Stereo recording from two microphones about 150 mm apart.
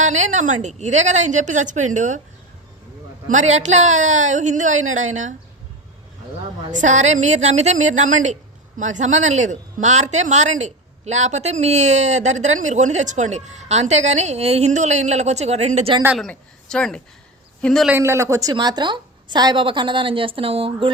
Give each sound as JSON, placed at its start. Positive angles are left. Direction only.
{"t": 0.0, "sound": "speech", "side_deg": -50}
{"t": 3.2, "sound": "speech", "side_deg": -50}
{"t": 6.7, "sound": "speech", "side_deg": -55}
{"t": 16.1, "sound": "a man's voice", "side_deg": 5}
{"t": 17.9, "sound": "a woman's voice", "side_deg": -15}